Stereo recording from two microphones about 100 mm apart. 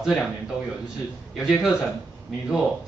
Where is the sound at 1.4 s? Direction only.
Centre (ahead or behind).